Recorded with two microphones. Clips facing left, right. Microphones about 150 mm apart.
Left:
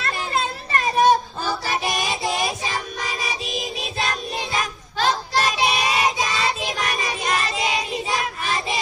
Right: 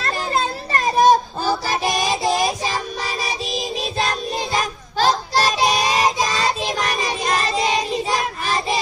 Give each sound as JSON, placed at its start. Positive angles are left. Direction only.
{"t": 0.0, "sound": "child singing", "side_deg": -35}